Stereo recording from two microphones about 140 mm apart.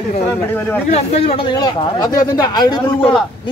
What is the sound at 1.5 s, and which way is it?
A man's voice, 30° left (ahead or behind).